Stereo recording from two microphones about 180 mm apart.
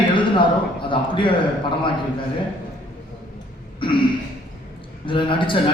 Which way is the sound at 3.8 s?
30° left (ahead or behind).